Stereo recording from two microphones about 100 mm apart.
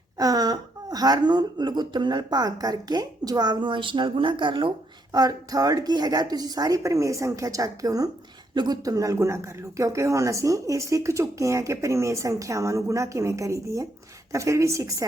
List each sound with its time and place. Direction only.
0.2 s speech: 40° right (ahead or behind); by 4.7 s 55° right (ahead or behind)
5.1 s speech: 40° right (ahead or behind)